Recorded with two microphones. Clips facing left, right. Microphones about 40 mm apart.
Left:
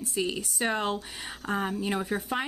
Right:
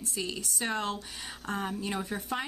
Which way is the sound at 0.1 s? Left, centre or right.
Left.